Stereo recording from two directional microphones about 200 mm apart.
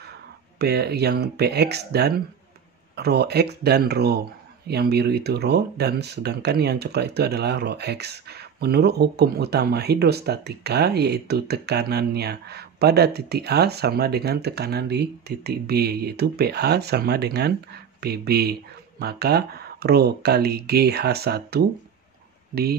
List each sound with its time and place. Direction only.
0.6 s speech: 55° right (ahead or behind)